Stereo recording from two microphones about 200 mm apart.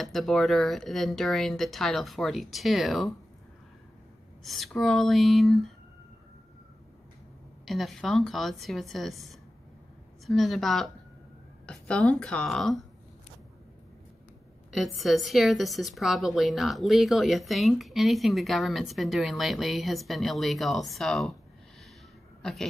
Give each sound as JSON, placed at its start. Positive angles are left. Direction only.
{"t": 0.0, "sound": "a woman's voice", "side_deg": 0}
{"t": 4.4, "sound": "a woman's voice", "side_deg": 0}
{"t": 7.6, "sound": "a woman's voice", "side_deg": 0}
{"t": 15.0, "sound": "a woman's voice", "side_deg": 0}
{"t": 22.4, "sound": "speech", "side_deg": 0}